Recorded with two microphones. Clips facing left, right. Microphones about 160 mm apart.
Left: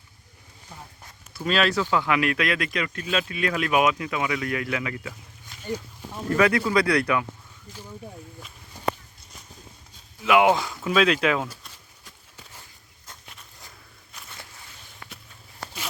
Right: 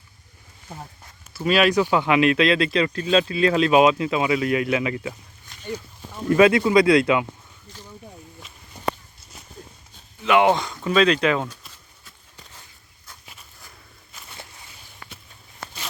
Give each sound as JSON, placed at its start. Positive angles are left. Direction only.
{"t": 1.3, "sound": "speech", "side_deg": -10}
{"t": 6.3, "sound": "speech", "side_deg": -20}
{"t": 7.7, "sound": "speech", "side_deg": 10}
{"t": 8.4, "sound": "a sound", "side_deg": 0}
{"t": 10.2, "sound": "speech", "side_deg": 5}
{"t": 14.1, "sound": "a sound", "side_deg": 0}